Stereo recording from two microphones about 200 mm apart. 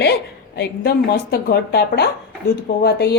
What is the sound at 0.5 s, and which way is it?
A woman's voice, 55° left (ahead or behind).